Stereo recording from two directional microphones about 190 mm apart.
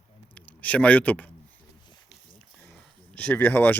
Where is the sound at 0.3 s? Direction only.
10° left (ahead or behind).